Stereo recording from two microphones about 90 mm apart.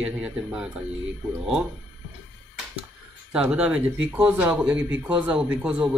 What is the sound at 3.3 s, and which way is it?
Speech, 10° right (ahead or behind).